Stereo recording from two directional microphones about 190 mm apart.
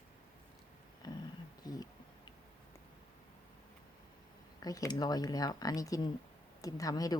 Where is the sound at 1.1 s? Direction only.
20° left (ahead or behind).